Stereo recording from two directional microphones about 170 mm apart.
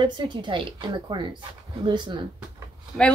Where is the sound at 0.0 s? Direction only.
25° right (ahead or behind).